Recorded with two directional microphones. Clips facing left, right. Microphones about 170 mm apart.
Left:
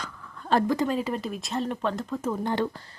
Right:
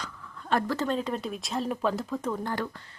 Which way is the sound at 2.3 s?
20° left (ahead or behind).